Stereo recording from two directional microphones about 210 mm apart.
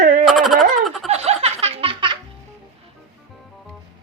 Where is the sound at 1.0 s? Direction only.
30° right (ahead or behind).